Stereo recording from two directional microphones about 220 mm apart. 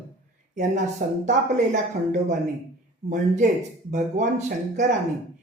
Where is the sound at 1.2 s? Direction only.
35° right (ahead or behind).